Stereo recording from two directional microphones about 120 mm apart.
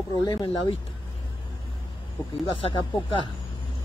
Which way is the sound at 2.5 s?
45° left (ahead or behind).